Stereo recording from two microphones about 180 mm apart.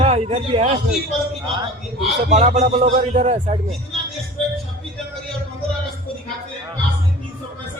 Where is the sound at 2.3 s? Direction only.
40° right (ahead or behind).